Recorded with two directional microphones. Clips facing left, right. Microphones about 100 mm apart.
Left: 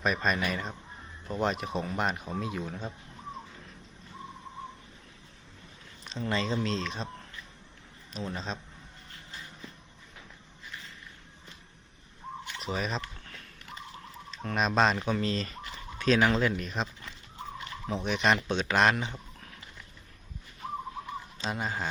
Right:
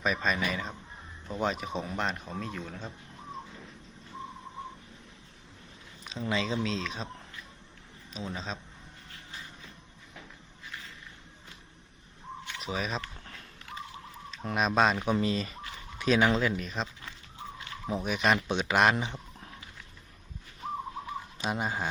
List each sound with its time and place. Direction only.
0.0 s speech: centre (ahead or behind)
6.1 s speech: 5° right (ahead or behind)
8.1 s speech: centre (ahead or behind)
12.5 s speech: centre (ahead or behind)
14.5 s speech: 5° right (ahead or behind)
21.3 s speech: 15° right (ahead or behind)